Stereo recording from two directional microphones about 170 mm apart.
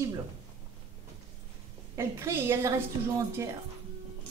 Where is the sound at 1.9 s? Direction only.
15° right (ahead or behind).